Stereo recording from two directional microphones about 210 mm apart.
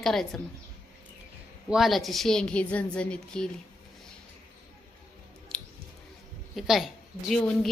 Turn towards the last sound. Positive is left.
turn(degrees=5)  # may be behind; listen again after turning